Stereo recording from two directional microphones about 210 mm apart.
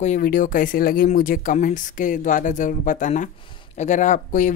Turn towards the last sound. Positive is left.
turn(degrees=35)  # may be behind; listen again after turning